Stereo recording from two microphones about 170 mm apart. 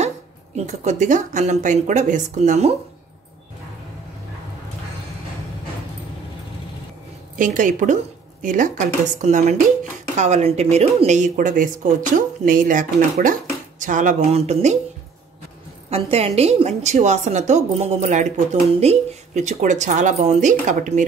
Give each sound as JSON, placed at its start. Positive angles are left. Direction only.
{"t": 0.7, "sound": "a woman's voice", "side_deg": -45}
{"t": 7.3, "sound": "a woman's voice", "side_deg": -50}
{"t": 15.9, "sound": "a woman's voice", "side_deg": -35}